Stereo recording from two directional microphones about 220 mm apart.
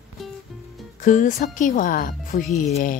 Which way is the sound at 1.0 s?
35° left (ahead or behind).